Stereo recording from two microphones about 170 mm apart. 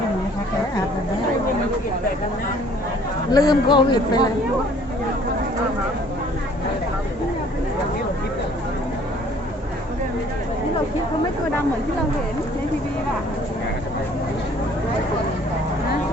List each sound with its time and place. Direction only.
3.3 s a man's voice: 25° left (ahead or behind)